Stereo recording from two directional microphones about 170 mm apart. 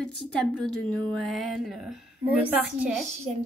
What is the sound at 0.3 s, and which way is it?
Speech, 5° left (ahead or behind).